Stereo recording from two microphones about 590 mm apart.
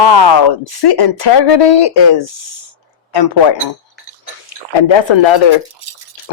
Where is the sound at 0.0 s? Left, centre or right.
Left.